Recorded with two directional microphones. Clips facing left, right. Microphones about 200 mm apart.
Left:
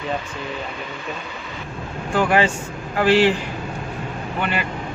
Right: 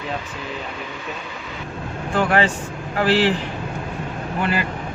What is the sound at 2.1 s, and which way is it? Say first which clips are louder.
A man's voice: left 1 dB; 5° left (ahead or behind).